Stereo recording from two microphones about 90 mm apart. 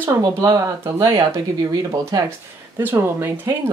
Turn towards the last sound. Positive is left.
turn(degrees=-30)  # may be behind; listen again after turning